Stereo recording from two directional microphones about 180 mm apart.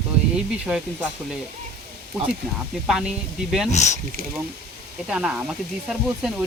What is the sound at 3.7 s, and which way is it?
Speech, 40° left (ahead or behind).